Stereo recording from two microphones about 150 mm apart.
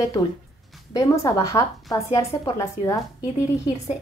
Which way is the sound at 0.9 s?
20° left (ahead or behind).